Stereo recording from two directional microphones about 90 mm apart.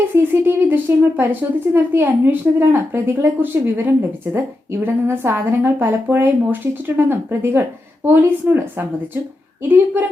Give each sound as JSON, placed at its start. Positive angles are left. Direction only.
{"t": 0.1, "sound": "speech", "side_deg": -25}